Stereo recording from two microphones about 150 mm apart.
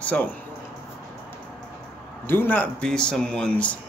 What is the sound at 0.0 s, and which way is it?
Speech, 10° left (ahead or behind).